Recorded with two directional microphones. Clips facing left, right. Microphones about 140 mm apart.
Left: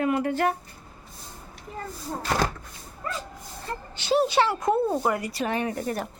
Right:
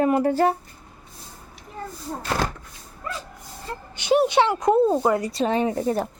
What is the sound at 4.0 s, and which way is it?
Speech, 15° right (ahead or behind).